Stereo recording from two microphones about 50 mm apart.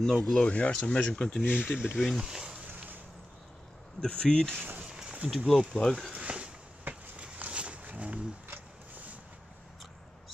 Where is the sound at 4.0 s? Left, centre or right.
Centre.